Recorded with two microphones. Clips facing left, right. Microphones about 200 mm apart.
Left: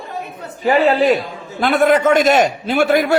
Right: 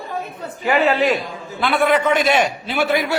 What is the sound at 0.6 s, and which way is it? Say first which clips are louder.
A man's voice: left 4 dB; 35° left (ahead or behind).